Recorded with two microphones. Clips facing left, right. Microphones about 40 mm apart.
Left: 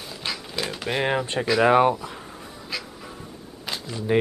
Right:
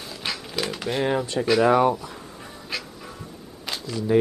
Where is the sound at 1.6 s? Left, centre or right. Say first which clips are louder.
Left 1 dB; left.